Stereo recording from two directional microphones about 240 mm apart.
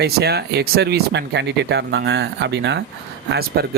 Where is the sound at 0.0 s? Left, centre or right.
Right.